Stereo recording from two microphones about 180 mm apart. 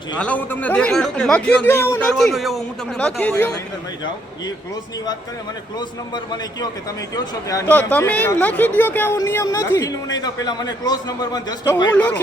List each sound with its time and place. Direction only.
0.2 s speech: 10° left (ahead or behind)
6.1 s a man's voice: 25° left (ahead or behind)
11.9 s speech: 5° left (ahead or behind)